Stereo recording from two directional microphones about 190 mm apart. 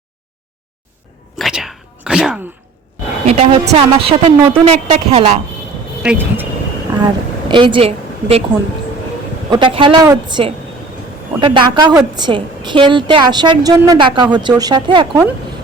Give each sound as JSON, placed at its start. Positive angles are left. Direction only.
{"t": 1.4, "sound": "a sound", "side_deg": 0}
{"t": 3.2, "sound": "a woman's voice", "side_deg": -35}
{"t": 6.0, "sound": "speech", "side_deg": -10}
{"t": 7.0, "sound": "a woman's voice", "side_deg": -25}
{"t": 9.5, "sound": "a woman's voice", "side_deg": -25}